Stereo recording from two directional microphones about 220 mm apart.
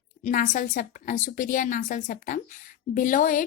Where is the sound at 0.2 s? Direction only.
35° left (ahead or behind).